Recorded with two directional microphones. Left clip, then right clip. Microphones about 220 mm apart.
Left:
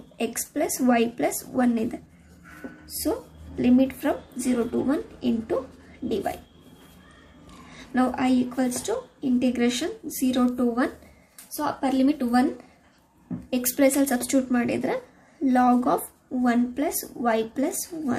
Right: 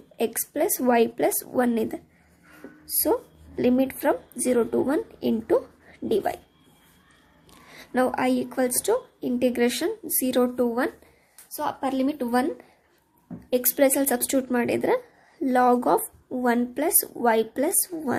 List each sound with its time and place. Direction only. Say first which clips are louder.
0.2 s a woman's voice: right 2 dB; 25° right (ahead or behind)
7.7 s a woman's voice: right 1 dB; 35° right (ahead or behind)
13.5 s a woman's voice: right 1 dB; 30° right (ahead or behind)